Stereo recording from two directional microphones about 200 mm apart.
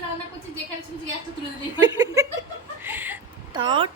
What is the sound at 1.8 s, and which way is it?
Chuckle, 20° right (ahead or behind).